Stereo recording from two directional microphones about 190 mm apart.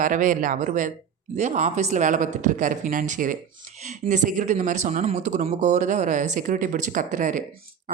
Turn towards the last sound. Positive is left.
turn(degrees=-45)  # may be behind; listen again after turning